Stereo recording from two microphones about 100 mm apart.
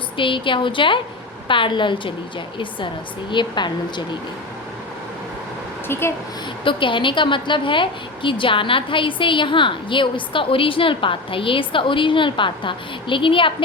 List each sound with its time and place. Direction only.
0.2 s a woman's voice: 55° left (ahead or behind)
5.9 s speech: 25° left (ahead or behind)
6.7 s a woman's voice: 60° left (ahead or behind)